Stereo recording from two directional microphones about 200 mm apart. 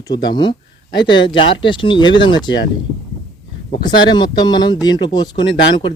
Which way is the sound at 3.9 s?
20° left (ahead or behind).